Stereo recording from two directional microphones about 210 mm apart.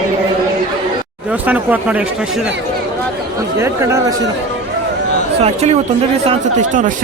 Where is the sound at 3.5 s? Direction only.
15° right (ahead or behind).